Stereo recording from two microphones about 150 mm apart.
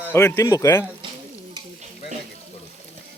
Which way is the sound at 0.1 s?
15° left (ahead or behind).